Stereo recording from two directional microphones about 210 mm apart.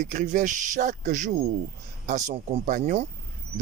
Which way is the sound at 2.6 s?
35° right (ahead or behind).